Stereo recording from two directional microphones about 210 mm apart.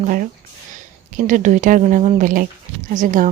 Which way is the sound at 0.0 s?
40° right (ahead or behind).